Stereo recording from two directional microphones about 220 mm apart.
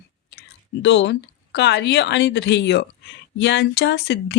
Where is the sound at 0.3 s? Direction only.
50° left (ahead or behind).